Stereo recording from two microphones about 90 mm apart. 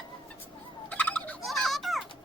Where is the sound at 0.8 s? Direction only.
15° left (ahead or behind).